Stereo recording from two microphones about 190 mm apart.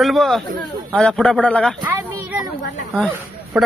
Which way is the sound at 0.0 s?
Centre (ahead or behind).